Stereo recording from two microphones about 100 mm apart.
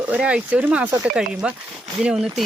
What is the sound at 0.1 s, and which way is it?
Speech, 10° right (ahead or behind).